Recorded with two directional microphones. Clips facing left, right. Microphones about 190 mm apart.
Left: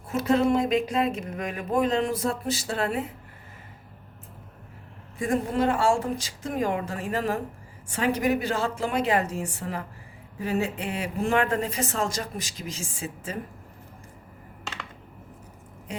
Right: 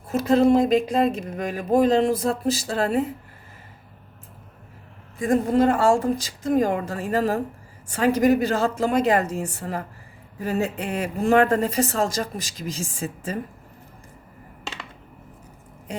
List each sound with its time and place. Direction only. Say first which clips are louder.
0.1 s speech: right 5 dB; 35° right (ahead or behind)
5.3 s speech: right 6 dB; 40° right (ahead or behind)